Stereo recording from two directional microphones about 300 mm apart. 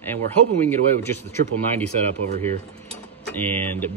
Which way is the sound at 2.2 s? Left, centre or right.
Right.